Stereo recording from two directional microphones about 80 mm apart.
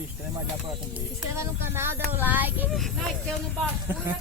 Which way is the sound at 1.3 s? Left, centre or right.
Right.